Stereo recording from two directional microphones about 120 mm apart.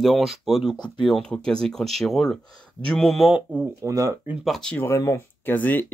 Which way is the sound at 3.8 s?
25° right (ahead or behind).